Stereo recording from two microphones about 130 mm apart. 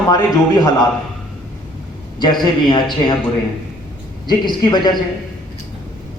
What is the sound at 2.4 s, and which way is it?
Speech, 35° left (ahead or behind).